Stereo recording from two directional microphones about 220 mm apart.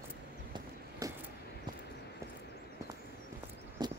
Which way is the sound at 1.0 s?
15° right (ahead or behind).